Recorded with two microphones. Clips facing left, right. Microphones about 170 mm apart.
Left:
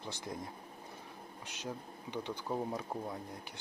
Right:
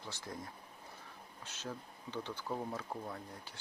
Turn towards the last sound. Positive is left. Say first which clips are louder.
# left 3 dB
turn(degrees=15)  # may be behind; listen again after turning